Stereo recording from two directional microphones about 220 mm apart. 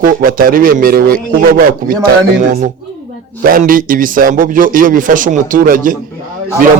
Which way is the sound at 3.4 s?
40° right (ahead or behind).